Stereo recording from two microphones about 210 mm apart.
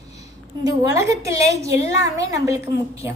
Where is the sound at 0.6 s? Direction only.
15° right (ahead or behind).